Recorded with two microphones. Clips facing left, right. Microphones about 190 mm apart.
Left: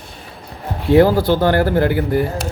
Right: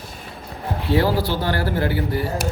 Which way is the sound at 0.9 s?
50° left (ahead or behind).